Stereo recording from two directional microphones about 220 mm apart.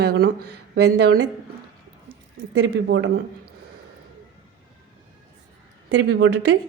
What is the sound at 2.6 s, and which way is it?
Speech, 55° right (ahead or behind).